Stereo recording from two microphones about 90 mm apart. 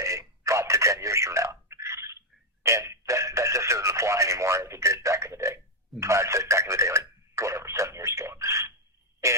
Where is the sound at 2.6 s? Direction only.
30° right (ahead or behind).